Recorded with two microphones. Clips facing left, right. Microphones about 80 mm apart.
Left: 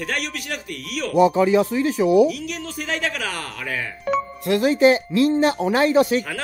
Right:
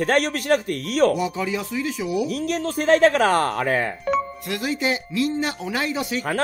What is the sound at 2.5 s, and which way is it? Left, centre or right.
Speech, right.